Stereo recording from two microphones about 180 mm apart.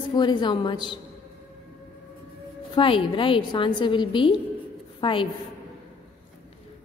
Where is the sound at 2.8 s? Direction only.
30° left (ahead or behind).